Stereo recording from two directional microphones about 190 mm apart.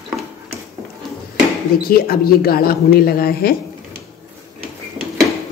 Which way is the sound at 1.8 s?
50° left (ahead or behind).